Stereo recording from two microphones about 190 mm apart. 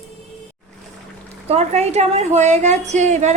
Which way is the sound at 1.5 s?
35° right (ahead or behind).